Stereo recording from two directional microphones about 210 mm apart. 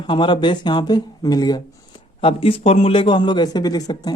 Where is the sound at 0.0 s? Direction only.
20° left (ahead or behind).